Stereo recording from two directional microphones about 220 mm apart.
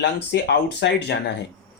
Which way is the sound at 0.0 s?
50° left (ahead or behind).